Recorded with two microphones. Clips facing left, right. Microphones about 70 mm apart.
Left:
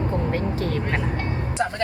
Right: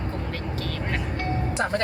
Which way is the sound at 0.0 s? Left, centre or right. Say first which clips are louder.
Left 7 dB; left.